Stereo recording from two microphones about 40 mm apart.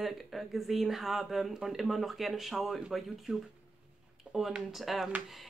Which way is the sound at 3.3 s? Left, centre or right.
Right.